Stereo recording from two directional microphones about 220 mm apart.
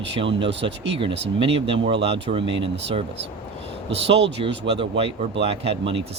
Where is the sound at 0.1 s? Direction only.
25° right (ahead or behind).